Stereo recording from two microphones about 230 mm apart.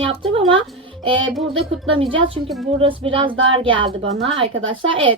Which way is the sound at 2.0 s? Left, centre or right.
Right.